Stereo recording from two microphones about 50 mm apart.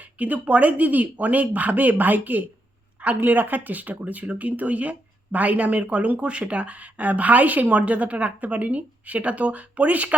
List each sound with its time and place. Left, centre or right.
0.0 s speech: right